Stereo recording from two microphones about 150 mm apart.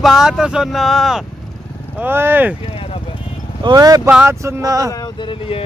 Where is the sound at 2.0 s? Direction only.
15° right (ahead or behind).